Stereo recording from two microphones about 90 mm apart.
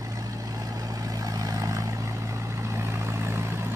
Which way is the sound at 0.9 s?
40° right (ahead or behind).